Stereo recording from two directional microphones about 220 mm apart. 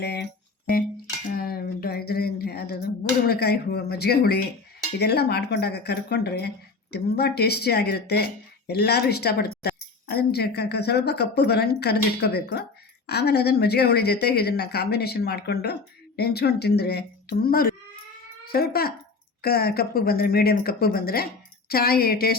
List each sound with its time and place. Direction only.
0.0 s speech: 50° left (ahead or behind)
1.3 s a sound: 45° left (ahead or behind)
4.9 s speech: 50° left (ahead or behind)